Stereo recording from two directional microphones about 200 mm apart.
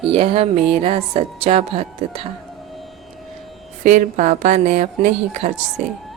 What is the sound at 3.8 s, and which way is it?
A woman's voice, 40° right (ahead or behind).